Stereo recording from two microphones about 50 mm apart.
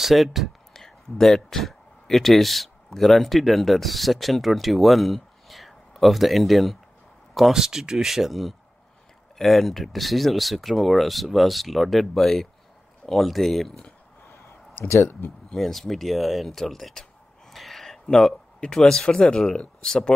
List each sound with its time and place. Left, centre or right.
0.0 s speech: centre
0.7 s speech: centre
7.5 s speech: centre
15.2 s speech: left
15.5 s speech: centre